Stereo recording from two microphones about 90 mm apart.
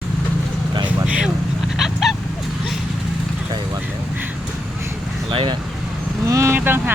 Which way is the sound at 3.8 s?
20° right (ahead or behind).